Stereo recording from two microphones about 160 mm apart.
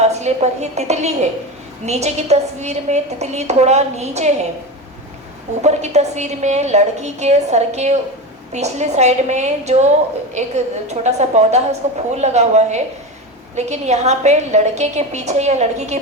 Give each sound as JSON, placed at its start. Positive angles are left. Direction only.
{"t": 0.0, "sound": "a woman's voice", "side_deg": -45}
{"t": 5.6, "sound": "a woman's voice", "side_deg": -45}